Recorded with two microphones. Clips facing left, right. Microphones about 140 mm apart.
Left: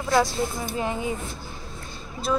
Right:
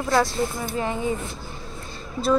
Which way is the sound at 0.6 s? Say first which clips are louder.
Right 1 dB; 10° left (ahead or behind).